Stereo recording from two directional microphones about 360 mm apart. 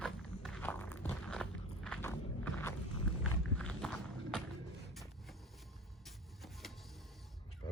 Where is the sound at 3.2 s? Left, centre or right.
Centre.